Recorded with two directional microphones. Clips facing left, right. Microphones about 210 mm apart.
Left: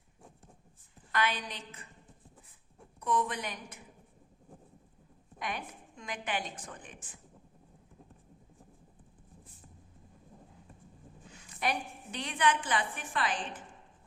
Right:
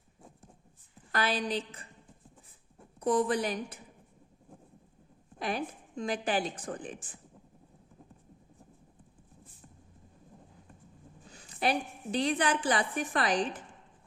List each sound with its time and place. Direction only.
1.1 s a woman's voice: 35° right (ahead or behind)
3.0 s a woman's voice: 35° right (ahead or behind)
5.4 s a woman's voice: 35° right (ahead or behind)
11.3 s a woman's voice: 35° right (ahead or behind)